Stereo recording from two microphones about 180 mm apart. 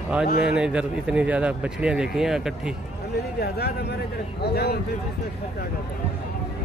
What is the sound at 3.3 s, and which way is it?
Speech, 60° left (ahead or behind).